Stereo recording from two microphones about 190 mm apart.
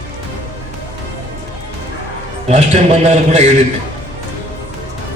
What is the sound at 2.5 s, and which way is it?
Speech, 35° right (ahead or behind).